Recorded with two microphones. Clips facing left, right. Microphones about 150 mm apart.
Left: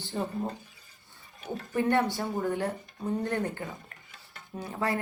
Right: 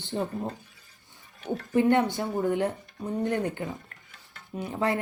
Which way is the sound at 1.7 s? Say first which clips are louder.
Right 4 dB; 20° right (ahead or behind).